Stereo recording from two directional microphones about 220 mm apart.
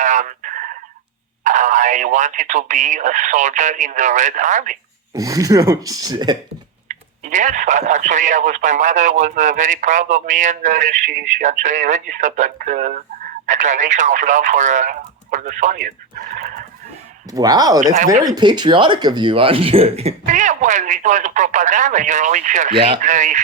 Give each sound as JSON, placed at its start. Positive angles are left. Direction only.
{"t": 0.0, "sound": "a sound", "side_deg": -35}
{"t": 1.5, "sound": "speech", "side_deg": -35}
{"t": 5.1, "sound": "speech", "side_deg": -15}
{"t": 6.8, "sound": "speech", "side_deg": -35}
{"t": 17.3, "sound": "speech", "side_deg": -15}
{"t": 22.7, "sound": "speech", "side_deg": -25}